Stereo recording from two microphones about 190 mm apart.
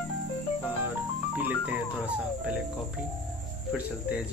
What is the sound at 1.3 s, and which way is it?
Music, 10° right (ahead or behind).